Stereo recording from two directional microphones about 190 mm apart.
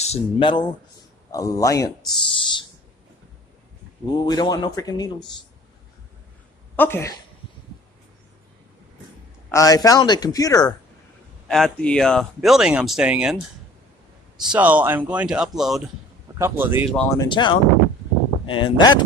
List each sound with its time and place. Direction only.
0.0 s speech: 30° left (ahead or behind)
2.0 s a sound: 25° left (ahead or behind)
4.1 s speech: 20° left (ahead or behind)
6.8 s speech: 15° left (ahead or behind)
9.5 s speech: 15° left (ahead or behind)
11.4 s speech: 5° left (ahead or behind)
14.4 s speech: 5° right (ahead or behind)
16.3 s speech: 10° right (ahead or behind)
17.2 s speech: 25° left (ahead or behind)